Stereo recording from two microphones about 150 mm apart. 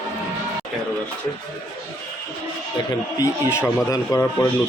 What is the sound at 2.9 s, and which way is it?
A man's voice, 20° left (ahead or behind).